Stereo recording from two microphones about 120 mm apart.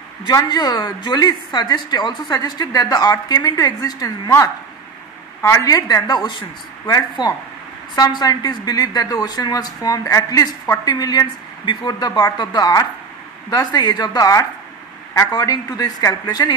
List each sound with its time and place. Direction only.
0.3 s a woman's voice: 30° left (ahead or behind)